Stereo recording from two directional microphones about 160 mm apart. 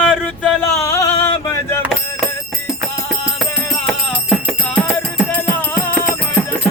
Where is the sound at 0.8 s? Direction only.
20° left (ahead or behind).